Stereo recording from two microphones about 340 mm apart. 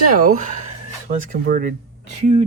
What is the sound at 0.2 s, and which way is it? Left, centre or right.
Speech, right.